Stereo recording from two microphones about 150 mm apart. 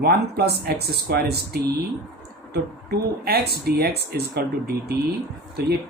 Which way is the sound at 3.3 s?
90° right.